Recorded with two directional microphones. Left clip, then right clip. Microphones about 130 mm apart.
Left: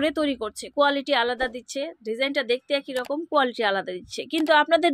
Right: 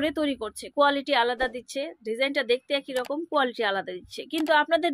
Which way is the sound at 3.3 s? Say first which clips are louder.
Left 4 dB; 25° left (ahead or behind).